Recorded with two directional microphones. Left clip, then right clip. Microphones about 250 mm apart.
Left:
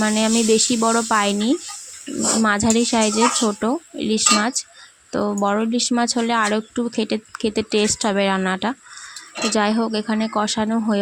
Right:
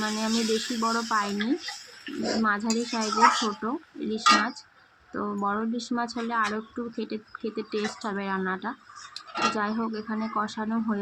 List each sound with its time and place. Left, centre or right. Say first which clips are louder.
0.0 s speech: left 9 dB; left